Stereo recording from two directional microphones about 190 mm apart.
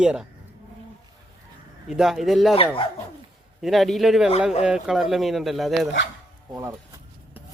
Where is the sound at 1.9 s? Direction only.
5° right (ahead or behind).